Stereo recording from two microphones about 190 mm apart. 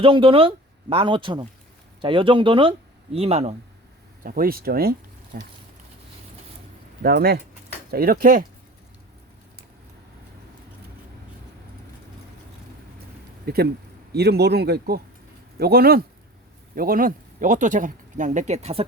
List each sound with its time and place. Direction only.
0.0 s speech: 30° right (ahead or behind)
4.2 s speech: 50° right (ahead or behind)
7.0 s speech: 55° right (ahead or behind)
13.4 s speech: 55° right (ahead or behind); by 18.9 s 30° right (ahead or behind)